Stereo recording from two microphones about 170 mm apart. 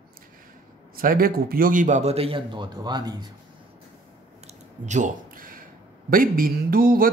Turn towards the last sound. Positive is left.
turn(degrees=-55)  # may be behind; listen again after turning